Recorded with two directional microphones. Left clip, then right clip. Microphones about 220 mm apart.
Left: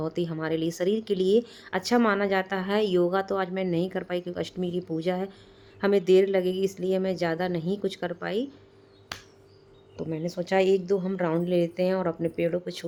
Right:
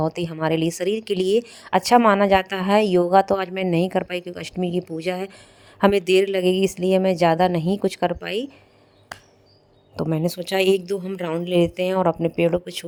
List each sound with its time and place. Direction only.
0.0 s speech: 30° right (ahead or behind)
9.1 s a sound: 15° right (ahead or behind)
9.9 s speech: 45° right (ahead or behind)